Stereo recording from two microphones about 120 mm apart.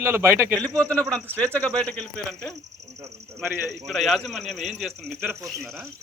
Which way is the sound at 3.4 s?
15° right (ahead or behind).